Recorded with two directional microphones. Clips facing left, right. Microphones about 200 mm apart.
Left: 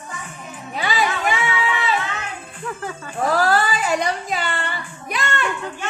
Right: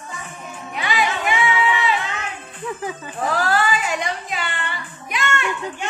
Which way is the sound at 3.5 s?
35° left (ahead or behind).